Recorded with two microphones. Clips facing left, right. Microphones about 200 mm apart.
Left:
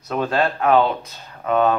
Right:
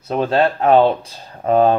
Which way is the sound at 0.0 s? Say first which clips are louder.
Right 4 dB; 30° right (ahead or behind).